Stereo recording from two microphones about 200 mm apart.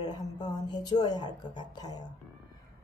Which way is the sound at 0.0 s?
20° left (ahead or behind).